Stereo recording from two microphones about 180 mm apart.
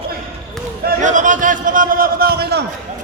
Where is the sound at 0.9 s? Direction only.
45° right (ahead or behind); by 2.6 s 65° right (ahead or behind).